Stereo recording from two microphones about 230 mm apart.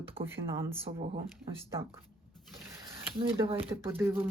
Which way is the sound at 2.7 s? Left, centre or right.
Right.